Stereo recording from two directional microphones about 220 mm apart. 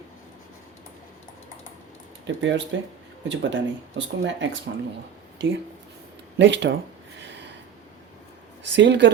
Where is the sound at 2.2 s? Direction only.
60° right (ahead or behind).